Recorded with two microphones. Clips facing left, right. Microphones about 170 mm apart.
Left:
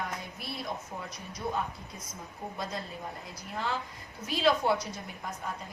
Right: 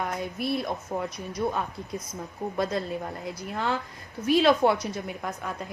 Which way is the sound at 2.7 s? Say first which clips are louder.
Right 8 dB; 65° right (ahead or behind).